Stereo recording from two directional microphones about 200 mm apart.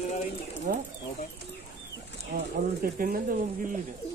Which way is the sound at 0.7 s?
50° right (ahead or behind).